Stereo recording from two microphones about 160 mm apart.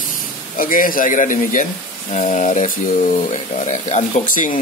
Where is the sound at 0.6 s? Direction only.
60° left (ahead or behind).